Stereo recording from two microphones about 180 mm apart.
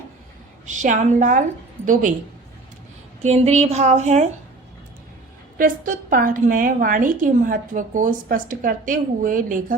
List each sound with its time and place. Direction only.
0.7 s a woman's voice: 45° right (ahead or behind)
3.2 s a woman's voice: 35° right (ahead or behind)
5.5 s a woman's voice: 50° right (ahead or behind)